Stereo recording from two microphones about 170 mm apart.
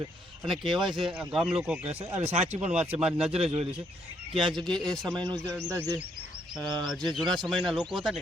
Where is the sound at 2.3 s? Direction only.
40° right (ahead or behind).